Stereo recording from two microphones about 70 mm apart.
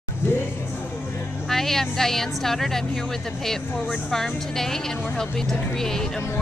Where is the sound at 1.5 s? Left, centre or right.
Centre.